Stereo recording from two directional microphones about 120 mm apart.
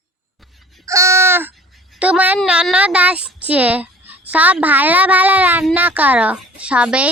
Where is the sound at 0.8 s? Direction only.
25° right (ahead or behind).